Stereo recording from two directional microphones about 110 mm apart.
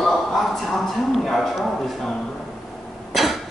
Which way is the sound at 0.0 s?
Centre (ahead or behind).